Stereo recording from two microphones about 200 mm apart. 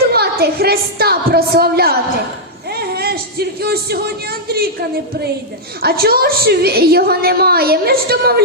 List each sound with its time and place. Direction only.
0.1 s a woman's voice: 50° right (ahead or behind)
5.8 s a woman's voice: 50° right (ahead or behind)